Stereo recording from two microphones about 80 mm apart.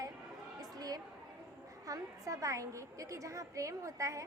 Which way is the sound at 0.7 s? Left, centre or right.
Right.